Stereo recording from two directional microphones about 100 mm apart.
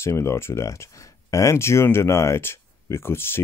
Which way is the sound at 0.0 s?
30° left (ahead or behind).